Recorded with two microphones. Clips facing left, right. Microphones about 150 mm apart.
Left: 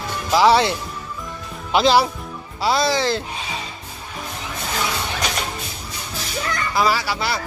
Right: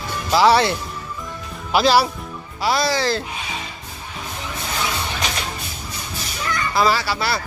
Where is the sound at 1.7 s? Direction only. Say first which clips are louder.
Even; 20° left (ahead or behind).